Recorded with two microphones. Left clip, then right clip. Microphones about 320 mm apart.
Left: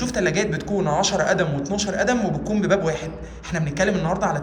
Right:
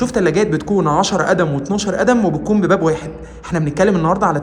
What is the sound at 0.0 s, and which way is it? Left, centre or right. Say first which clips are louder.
Speech: right 7 dB; centre.